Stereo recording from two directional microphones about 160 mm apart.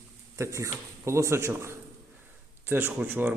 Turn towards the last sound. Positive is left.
turn(degrees=-10)  # may be behind; listen again after turning